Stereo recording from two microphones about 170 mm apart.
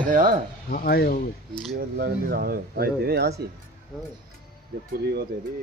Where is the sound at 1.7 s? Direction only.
60° right (ahead or behind).